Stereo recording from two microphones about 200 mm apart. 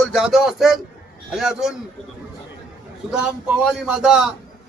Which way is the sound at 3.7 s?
5° right (ahead or behind).